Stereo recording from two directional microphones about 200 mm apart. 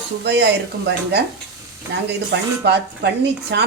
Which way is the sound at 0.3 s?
55° right (ahead or behind).